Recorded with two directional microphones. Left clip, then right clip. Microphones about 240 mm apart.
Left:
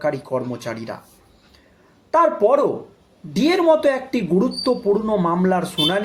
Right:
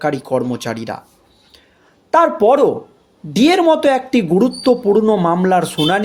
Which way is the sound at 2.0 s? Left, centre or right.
Right.